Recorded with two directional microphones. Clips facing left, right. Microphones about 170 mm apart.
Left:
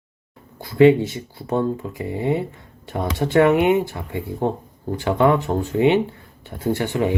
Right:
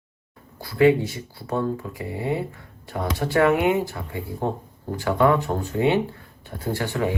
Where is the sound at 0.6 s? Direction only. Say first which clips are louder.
Left 4 dB; 25° left (ahead or behind).